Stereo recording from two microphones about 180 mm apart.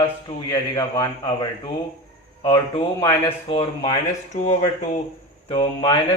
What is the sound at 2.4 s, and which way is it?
A man's voice, 30° left (ahead or behind).